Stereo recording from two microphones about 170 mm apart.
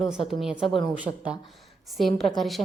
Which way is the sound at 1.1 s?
15° left (ahead or behind).